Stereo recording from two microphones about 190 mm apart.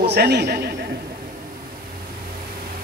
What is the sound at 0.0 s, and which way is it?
Speech, 60° right (ahead or behind).